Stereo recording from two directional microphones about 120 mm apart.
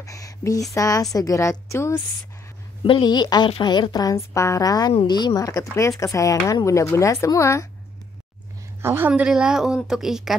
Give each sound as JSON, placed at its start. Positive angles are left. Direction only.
{"t": 0.0, "sound": "speech", "side_deg": 30}
{"t": 2.8, "sound": "a woman's voice", "side_deg": 40}
{"t": 8.8, "sound": "speech", "side_deg": -15}